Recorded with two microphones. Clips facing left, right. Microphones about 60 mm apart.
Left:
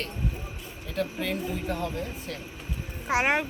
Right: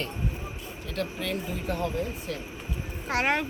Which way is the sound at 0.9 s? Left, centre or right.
Centre.